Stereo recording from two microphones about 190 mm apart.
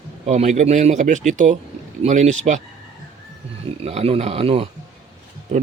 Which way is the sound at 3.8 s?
30° right (ahead or behind).